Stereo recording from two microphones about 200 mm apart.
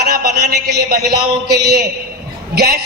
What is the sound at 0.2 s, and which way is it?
Speech, 50° right (ahead or behind).